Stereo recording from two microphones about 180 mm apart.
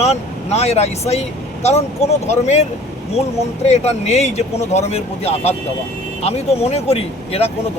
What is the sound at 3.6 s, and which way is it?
Speech, 35° left (ahead or behind).